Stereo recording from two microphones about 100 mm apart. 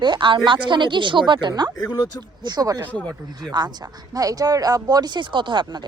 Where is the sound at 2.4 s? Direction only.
45° right (ahead or behind).